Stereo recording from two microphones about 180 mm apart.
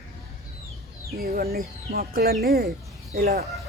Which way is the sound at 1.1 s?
55° right (ahead or behind).